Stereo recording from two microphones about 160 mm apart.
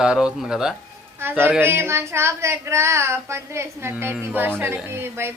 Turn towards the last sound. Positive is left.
turn(degrees=-15)  # may be behind; listen again after turning